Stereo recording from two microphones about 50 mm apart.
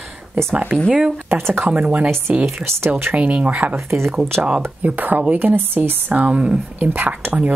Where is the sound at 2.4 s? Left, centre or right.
Right.